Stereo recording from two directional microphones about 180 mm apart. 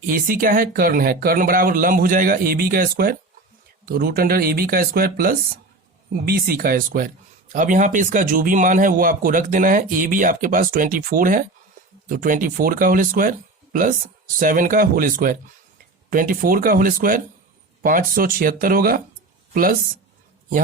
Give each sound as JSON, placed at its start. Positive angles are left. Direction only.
{"t": 0.0, "sound": "speech", "side_deg": -50}
{"t": 14.3, "sound": "speech", "side_deg": -50}